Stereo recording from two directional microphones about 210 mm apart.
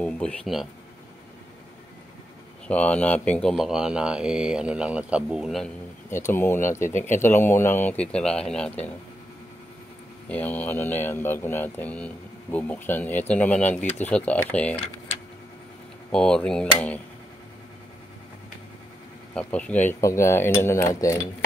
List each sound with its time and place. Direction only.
0.0 s speech: 5° left (ahead or behind)
2.7 s speech: 5° left (ahead or behind)
6.0 s speech: 10° left (ahead or behind)
6.9 s speech: 35° left (ahead or behind)
7.3 s speech: 10° left (ahead or behind)
10.2 s speech: 5° left (ahead or behind)
16.1 s speech: 5° left (ahead or behind)
19.3 s speech: 5° left (ahead or behind)